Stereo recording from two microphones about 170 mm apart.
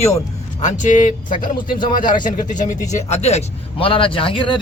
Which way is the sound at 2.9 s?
40° left (ahead or behind).